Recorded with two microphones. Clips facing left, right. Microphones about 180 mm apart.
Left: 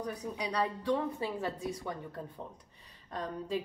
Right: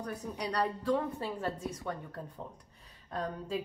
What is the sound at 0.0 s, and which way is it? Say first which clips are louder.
A woman's voice: left 1 dB; centre (ahead or behind).